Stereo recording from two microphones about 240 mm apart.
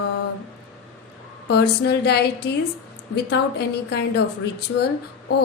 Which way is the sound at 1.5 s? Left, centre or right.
Left.